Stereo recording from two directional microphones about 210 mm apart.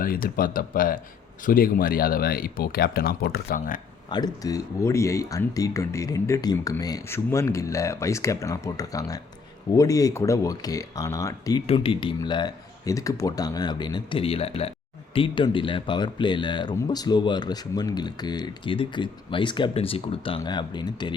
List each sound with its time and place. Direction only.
0.0 s speech: 45° left (ahead or behind)
4.1 s speech: 20° left (ahead or behind)
11.6 s speech: 25° left (ahead or behind)